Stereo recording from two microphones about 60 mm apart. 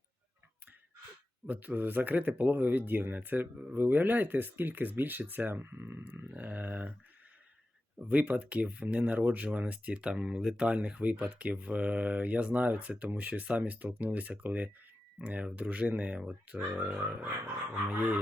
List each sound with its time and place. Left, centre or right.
1.5 s speech: right
7.9 s speech: right